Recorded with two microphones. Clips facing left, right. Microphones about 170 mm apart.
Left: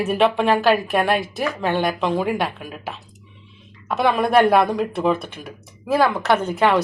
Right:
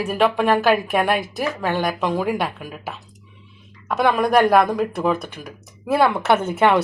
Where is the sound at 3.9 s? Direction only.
Centre (ahead or behind).